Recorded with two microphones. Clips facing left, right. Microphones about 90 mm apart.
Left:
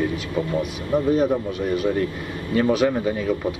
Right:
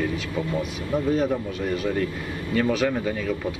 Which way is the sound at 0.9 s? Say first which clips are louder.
Left 4 dB; 15° left (ahead or behind).